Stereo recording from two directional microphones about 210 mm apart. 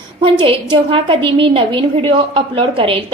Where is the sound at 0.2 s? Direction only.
25° right (ahead or behind).